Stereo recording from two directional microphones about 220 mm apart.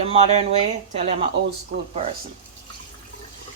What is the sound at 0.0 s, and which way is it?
Speech, 25° right (ahead or behind).